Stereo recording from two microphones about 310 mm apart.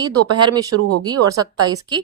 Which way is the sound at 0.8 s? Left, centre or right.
Right.